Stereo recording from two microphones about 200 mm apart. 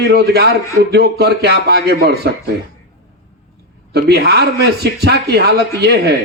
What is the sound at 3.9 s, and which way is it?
Speech, 55° right (ahead or behind).